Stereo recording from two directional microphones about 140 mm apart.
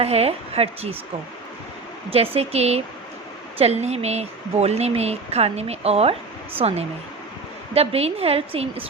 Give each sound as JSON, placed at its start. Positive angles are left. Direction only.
{"t": 0.0, "sound": "speech", "side_deg": -45}
{"t": 2.0, "sound": "speech", "side_deg": -45}